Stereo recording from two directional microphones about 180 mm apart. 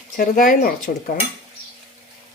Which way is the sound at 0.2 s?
50° left (ahead or behind).